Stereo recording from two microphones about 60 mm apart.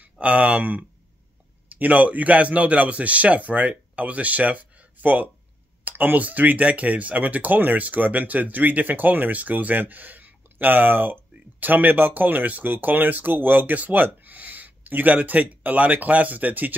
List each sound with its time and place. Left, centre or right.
0.0 s speech: right